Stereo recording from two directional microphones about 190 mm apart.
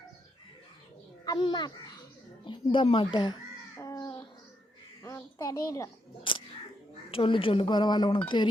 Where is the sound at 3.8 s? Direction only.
15° left (ahead or behind).